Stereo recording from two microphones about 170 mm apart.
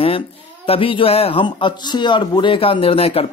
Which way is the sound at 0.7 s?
30° left (ahead or behind).